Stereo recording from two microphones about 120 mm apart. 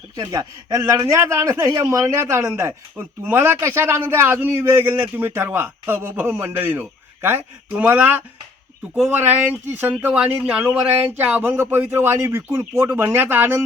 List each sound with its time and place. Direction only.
0.2 s speech: 30° right (ahead or behind); by 8.2 s 15° right (ahead or behind)
9.7 s speech: 15° right (ahead or behind)